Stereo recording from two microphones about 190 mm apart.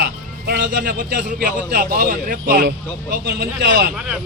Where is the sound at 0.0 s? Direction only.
55° right (ahead or behind).